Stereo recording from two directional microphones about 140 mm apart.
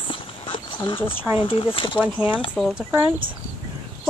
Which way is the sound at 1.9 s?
10° right (ahead or behind).